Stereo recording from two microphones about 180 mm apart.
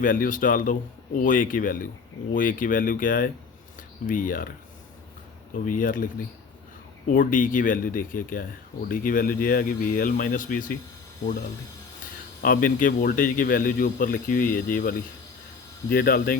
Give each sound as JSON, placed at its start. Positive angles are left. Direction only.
{"t": 0.0, "sound": "speech", "side_deg": 50}
{"t": 5.6, "sound": "speech", "side_deg": 50}
{"t": 7.1, "sound": "speech", "side_deg": 50}
{"t": 12.4, "sound": "speech", "side_deg": 50}